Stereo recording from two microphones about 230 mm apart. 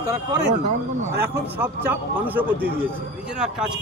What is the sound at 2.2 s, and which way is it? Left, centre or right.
Speech, centre.